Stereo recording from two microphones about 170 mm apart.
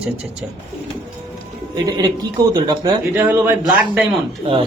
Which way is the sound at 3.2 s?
15° right (ahead or behind).